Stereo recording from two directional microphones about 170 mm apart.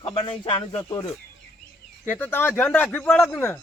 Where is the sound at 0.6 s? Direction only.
15° left (ahead or behind).